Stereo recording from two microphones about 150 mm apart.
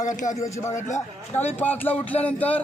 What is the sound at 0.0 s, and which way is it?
Speech, 55° left (ahead or behind).